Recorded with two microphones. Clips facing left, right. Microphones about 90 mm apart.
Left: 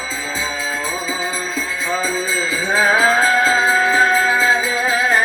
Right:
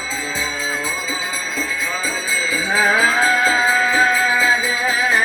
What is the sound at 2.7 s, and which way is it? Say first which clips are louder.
Music: left 2 dB; 40° left (ahead or behind).